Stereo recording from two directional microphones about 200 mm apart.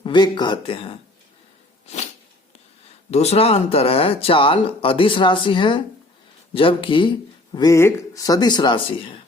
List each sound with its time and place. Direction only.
0.0 s speech: 20° left (ahead or behind)
3.1 s speech: 30° left (ahead or behind)